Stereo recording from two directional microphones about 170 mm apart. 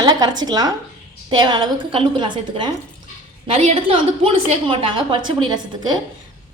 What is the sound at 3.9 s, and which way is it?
A woman's voice, 30° right (ahead or behind).